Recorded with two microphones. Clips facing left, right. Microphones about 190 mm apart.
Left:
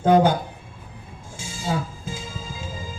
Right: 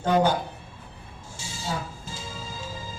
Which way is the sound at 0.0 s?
50° left (ahead or behind).